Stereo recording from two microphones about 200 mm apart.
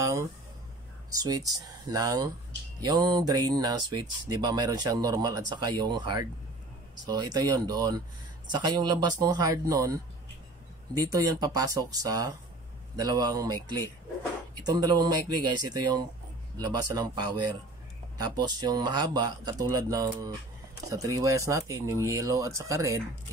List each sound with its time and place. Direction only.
0.0 s speech: 15° right (ahead or behind)
11.0 s speech: 15° right (ahead or behind)